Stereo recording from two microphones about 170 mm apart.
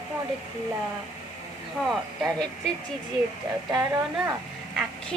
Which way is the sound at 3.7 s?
15° right (ahead or behind).